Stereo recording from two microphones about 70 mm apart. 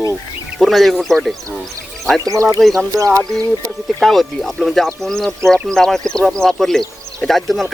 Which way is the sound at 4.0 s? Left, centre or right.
Centre.